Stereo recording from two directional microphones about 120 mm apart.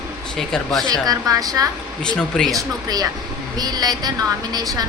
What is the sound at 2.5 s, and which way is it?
A woman's voice, 30° right (ahead or behind).